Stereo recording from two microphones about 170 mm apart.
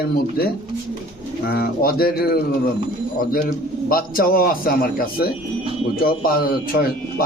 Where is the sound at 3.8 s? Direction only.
60° left (ahead or behind).